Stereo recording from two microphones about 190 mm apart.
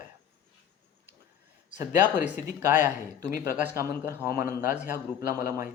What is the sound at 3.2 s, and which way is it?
Speech, 50° left (ahead or behind).